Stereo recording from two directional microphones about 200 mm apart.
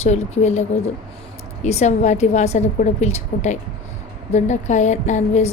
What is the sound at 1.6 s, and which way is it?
Speech, 35° left (ahead or behind).